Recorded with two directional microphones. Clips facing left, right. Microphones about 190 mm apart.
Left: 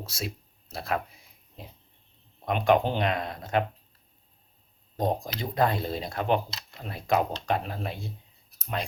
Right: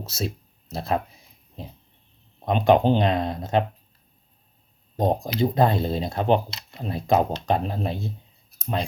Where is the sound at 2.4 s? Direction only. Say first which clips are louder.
Right 5 dB; 25° right (ahead or behind).